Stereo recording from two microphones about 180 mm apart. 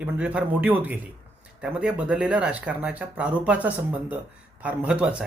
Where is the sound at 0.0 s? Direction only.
5° right (ahead or behind).